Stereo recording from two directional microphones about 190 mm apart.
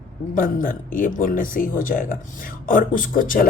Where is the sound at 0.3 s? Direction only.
45° left (ahead or behind).